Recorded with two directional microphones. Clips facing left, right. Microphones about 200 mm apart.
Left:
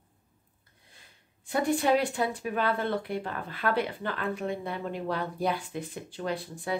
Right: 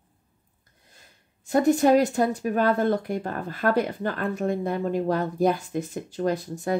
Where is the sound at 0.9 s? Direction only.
45° right (ahead or behind).